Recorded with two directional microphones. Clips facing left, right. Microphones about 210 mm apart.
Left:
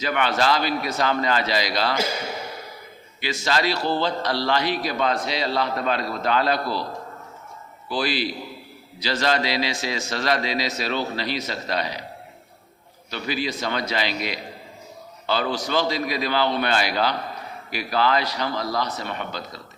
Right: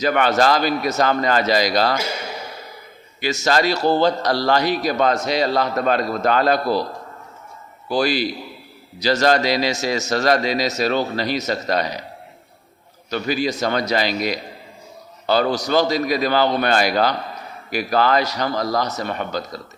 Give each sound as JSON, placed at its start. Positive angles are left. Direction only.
{"t": 0.0, "sound": "a man's voice", "side_deg": -45}
{"t": 3.2, "sound": "a man's voice", "side_deg": -45}
{"t": 7.9, "sound": "a man's voice", "side_deg": -45}
{"t": 13.1, "sound": "a man's voice", "side_deg": -45}